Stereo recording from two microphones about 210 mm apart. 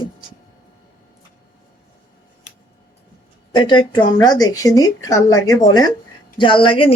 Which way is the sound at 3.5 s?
20° left (ahead or behind).